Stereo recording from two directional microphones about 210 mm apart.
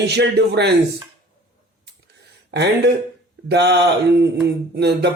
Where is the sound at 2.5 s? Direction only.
55° right (ahead or behind).